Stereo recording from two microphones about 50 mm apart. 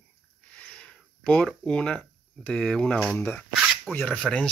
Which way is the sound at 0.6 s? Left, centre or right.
Left.